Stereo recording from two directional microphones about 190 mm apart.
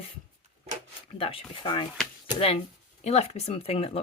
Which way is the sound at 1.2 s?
30° left (ahead or behind).